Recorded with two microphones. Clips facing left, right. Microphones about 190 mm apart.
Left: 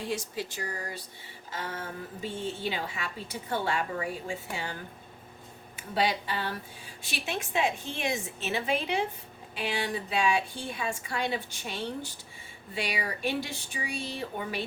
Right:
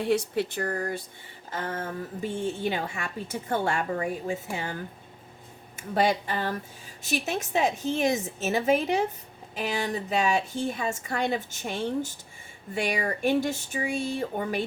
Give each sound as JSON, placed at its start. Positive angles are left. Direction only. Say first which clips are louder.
{"t": 0.0, "sound": "a woman's voice", "louder": "right 8 dB", "side_deg": -60}